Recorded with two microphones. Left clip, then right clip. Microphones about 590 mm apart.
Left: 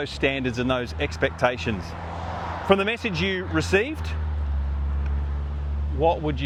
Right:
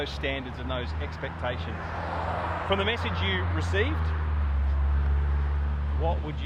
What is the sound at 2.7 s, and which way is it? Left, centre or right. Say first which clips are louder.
Speech: left 8 dB; left.